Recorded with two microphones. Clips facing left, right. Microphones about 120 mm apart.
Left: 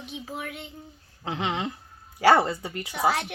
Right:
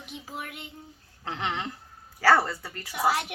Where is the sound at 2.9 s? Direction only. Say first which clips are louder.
Left 1 dB; 5° right (ahead or behind).